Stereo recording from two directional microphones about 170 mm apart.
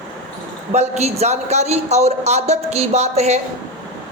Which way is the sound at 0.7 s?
40° right (ahead or behind).